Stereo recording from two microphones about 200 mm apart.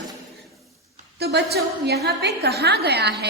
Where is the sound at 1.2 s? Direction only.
55° right (ahead or behind).